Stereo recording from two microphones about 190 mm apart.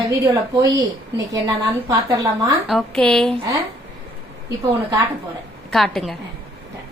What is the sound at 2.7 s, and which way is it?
Speech, 5° left (ahead or behind).